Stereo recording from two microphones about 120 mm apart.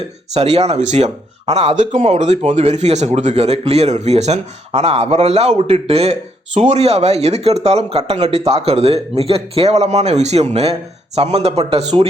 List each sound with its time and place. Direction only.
0.3 s speech: 60° right (ahead or behind); by 2.0 s 90° right
2.1 s speech: 70° right (ahead or behind)